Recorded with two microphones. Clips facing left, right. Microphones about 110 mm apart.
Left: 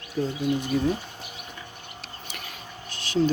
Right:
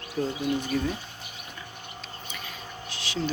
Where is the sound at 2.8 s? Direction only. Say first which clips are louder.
Left 7 dB; 50° left (ahead or behind).